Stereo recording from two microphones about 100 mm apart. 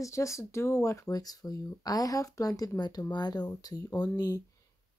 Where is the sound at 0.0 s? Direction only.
30° left (ahead or behind).